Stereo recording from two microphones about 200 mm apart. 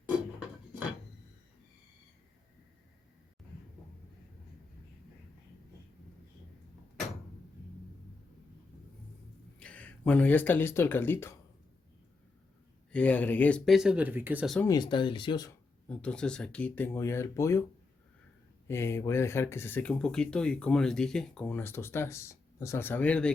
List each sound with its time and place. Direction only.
9.6 s speech: 5° left (ahead or behind)
12.9 s speech: 5° left (ahead or behind); by 14.5 s 10° right (ahead or behind)
14.7 s speech: 20° left (ahead or behind)
15.9 s speech: 5° left (ahead or behind)
18.7 s speech: 10° left (ahead or behind)